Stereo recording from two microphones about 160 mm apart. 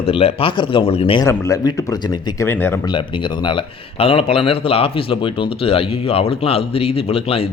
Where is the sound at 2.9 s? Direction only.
30° left (ahead or behind).